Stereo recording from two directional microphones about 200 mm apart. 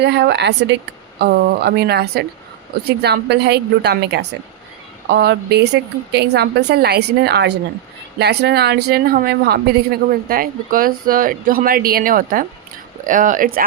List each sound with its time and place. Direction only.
0.0 s a woman's voice: 55° right (ahead or behind)